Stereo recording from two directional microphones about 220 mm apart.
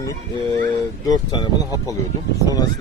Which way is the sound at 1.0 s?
15° left (ahead or behind).